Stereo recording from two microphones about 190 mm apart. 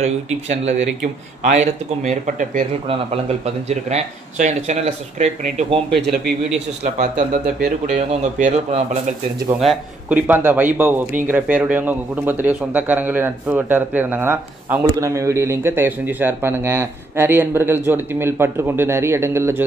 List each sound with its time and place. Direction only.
0.0 s speech: 35° right (ahead or behind)
6.8 s speech: 40° right (ahead or behind)
9.6 s speech: 5° right (ahead or behind)